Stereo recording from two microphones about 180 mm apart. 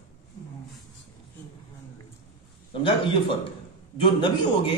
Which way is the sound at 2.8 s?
30° left (ahead or behind).